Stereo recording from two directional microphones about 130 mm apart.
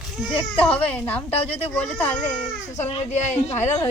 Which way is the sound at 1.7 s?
10° left (ahead or behind).